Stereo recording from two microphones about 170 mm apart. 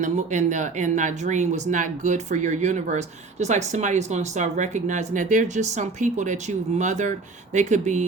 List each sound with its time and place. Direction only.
0.0 s speech: 45° right (ahead or behind)